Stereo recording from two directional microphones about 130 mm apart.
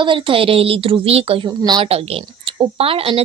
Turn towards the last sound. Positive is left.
turn(degrees=-45)  # may be behind; listen again after turning